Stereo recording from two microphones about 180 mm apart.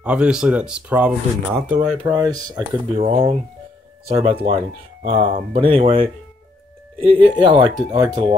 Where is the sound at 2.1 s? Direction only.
20° right (ahead or behind).